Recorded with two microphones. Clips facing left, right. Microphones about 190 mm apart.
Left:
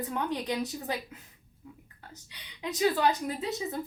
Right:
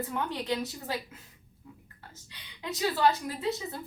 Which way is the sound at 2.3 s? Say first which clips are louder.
Left 1 dB; 15° left (ahead or behind).